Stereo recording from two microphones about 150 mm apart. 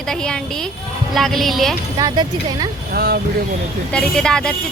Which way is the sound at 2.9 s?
90° right.